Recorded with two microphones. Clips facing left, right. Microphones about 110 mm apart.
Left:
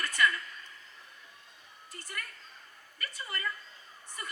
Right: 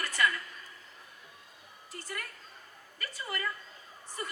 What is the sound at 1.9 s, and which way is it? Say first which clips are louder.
Speech: right 2 dB; 25° right (ahead or behind).